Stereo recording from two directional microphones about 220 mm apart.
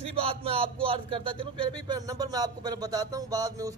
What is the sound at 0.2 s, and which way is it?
Speech, 25° right (ahead or behind).